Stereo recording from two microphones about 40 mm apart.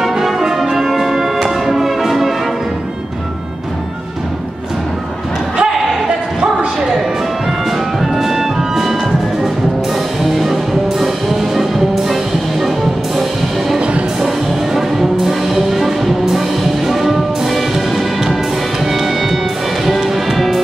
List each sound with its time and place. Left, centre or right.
0.0 s music: centre
5.6 s a sound: right
8.0 s music: centre
10.3 s music: centre
14.2 s music: centre